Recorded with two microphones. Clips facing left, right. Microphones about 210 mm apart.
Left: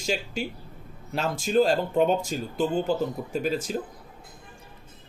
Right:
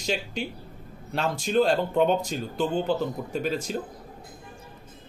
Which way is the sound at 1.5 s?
5° left (ahead or behind).